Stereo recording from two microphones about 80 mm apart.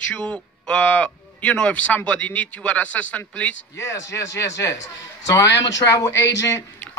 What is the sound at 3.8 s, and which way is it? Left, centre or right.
Speech, left.